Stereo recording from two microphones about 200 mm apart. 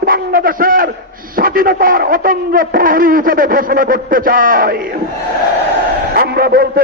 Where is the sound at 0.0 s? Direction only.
50° right (ahead or behind).